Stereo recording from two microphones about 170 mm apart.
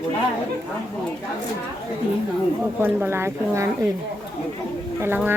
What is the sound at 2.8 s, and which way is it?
Speech, 10° right (ahead or behind).